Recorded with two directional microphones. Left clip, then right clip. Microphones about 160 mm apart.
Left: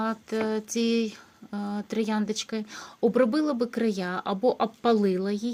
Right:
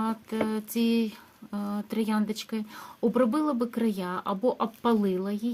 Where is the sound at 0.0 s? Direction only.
20° left (ahead or behind).